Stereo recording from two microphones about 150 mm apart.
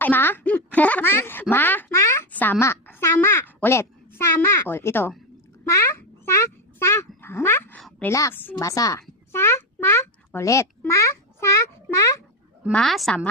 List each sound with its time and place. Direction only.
0.0 s a woman's voice: 15° left (ahead or behind)
7.8 s a sound: centre (ahead or behind)
8.0 s a child's voice: 15° left (ahead or behind)
12.7 s a woman's voice: centre (ahead or behind)